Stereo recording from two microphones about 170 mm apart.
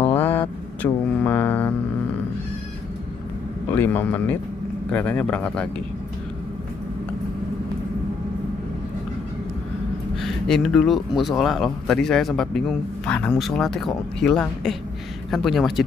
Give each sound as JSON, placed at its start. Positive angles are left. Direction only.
{"t": 0.1, "sound": "vehicle", "side_deg": 10}
{"t": 3.7, "sound": "speech", "side_deg": 10}
{"t": 10.2, "sound": "speech", "side_deg": 5}